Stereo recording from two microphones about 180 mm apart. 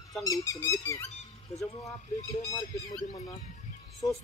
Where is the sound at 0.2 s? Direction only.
20° left (ahead or behind).